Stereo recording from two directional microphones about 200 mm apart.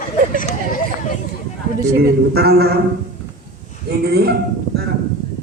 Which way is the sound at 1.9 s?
50° right (ahead or behind).